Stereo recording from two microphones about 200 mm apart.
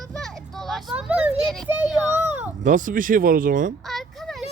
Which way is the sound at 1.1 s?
5° right (ahead or behind).